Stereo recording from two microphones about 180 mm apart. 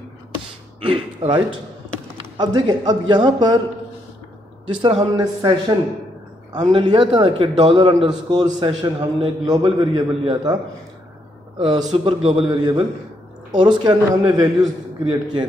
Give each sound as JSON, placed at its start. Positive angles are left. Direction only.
{"t": 0.8, "sound": "a man's voice", "side_deg": -30}
{"t": 4.6, "sound": "a man's voice", "side_deg": -25}
{"t": 6.5, "sound": "a man's voice", "side_deg": -25}